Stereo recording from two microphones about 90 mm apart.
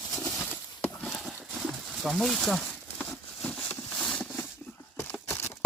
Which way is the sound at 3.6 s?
20° left (ahead or behind).